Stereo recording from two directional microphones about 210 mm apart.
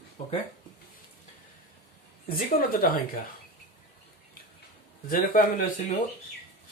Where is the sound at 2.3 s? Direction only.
45° left (ahead or behind).